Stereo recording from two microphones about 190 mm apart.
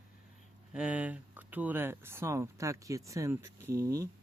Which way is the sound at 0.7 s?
5° right (ahead or behind).